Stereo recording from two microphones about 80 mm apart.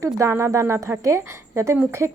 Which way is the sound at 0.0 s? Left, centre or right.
Right.